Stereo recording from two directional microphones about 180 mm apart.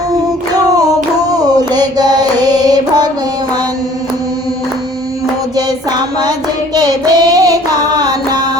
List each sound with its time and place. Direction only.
0.5 s a sound: 20° right (ahead or behind)
5.5 s music: 25° right (ahead or behind)
6.7 s carnatic music: 20° right (ahead or behind)